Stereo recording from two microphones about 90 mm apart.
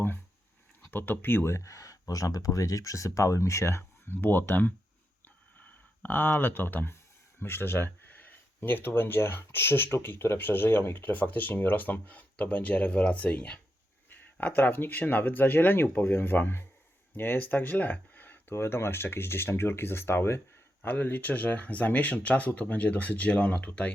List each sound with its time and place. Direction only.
0.9 s speech: 20° left (ahead or behind)